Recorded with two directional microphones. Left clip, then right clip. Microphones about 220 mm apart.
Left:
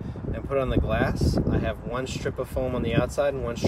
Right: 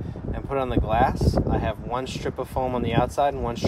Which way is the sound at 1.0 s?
Centre (ahead or behind).